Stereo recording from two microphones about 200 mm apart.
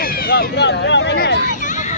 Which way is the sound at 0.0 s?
50° left (ahead or behind).